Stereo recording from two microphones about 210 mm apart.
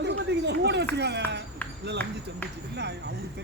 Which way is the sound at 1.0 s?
55° right (ahead or behind).